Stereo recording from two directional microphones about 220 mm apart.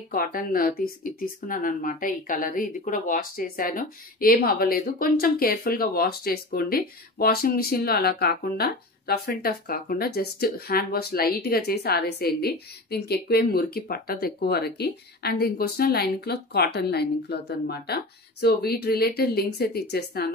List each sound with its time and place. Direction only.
0.1 s speech: 40° left (ahead or behind)